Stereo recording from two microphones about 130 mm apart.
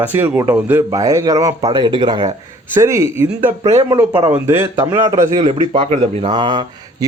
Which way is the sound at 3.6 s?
55° right (ahead or behind).